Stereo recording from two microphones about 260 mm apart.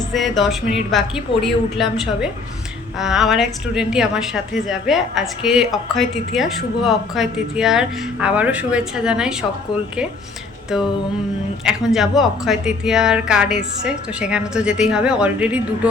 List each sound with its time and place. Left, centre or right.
0.1 s a woman's voice: centre
10.7 s a woman's voice: centre